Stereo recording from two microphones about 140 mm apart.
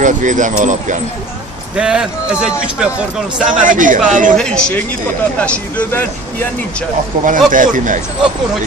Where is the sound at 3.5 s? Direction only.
70° right (ahead or behind).